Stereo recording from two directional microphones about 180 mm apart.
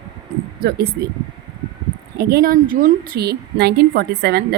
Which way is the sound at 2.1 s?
55° right (ahead or behind).